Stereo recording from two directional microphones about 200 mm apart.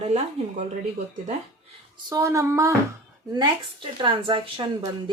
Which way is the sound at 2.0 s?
15° right (ahead or behind).